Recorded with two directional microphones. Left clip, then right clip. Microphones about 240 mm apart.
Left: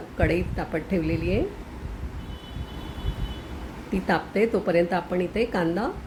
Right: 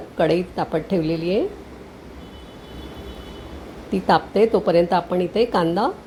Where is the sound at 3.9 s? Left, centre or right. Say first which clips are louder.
Right 7 dB; centre.